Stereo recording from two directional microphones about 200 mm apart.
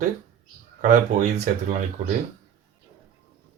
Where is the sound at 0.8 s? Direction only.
35° right (ahead or behind).